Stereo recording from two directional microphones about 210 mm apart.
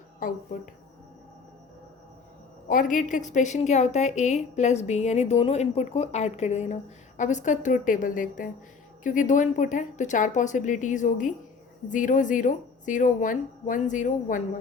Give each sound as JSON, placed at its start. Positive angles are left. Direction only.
{"t": 2.6, "sound": "a woman's voice", "side_deg": 40}